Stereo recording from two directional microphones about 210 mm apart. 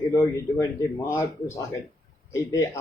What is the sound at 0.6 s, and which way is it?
Speech, 15° left (ahead or behind).